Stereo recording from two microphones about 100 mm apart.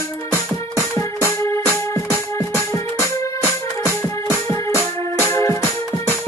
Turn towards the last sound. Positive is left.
turn(degrees=25)  # may be behind; listen again after turning